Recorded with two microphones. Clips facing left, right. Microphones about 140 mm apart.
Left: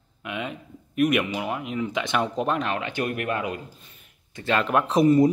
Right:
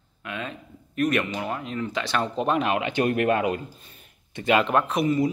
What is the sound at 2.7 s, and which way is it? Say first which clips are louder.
Speech: right 4 dB; 20° right (ahead or behind).